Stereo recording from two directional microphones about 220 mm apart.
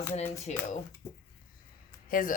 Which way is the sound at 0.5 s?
30° left (ahead or behind).